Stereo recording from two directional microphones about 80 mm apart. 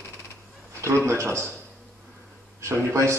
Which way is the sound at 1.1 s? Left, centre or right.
Right.